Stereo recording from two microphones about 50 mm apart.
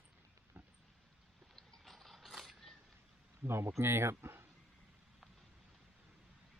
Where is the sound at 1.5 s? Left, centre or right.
Centre.